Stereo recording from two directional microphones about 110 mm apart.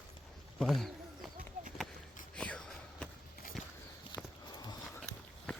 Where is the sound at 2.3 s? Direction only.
10° left (ahead or behind).